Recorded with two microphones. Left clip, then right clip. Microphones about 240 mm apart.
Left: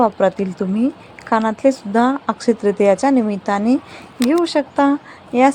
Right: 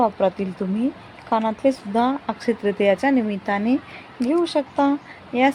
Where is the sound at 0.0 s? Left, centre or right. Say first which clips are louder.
Left 4 dB; centre.